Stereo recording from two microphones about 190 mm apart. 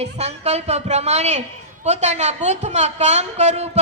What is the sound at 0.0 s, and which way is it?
A woman's voice, 35° right (ahead or behind).